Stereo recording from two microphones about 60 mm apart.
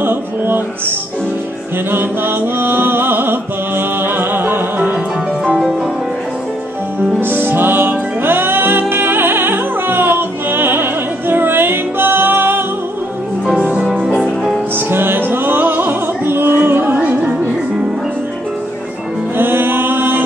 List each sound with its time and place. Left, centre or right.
0.0 s music: right
1.9 s chant: right
7.2 s music: right
13.6 s music: centre
14.9 s music: right
19.3 s mantra: right